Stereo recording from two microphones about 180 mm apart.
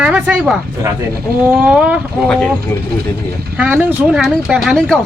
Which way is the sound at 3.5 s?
5° right (ahead or behind).